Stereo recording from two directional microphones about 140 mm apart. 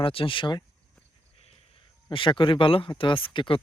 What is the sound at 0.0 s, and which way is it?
Speech, 40° left (ahead or behind).